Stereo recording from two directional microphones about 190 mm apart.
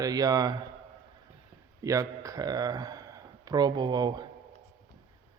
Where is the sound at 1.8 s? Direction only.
15° right (ahead or behind).